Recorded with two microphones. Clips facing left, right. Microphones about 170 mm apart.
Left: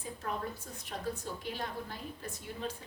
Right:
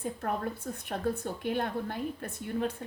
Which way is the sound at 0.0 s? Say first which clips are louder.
Right 6 dB; 55° right (ahead or behind).